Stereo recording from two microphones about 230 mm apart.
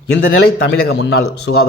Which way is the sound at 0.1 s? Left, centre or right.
Left.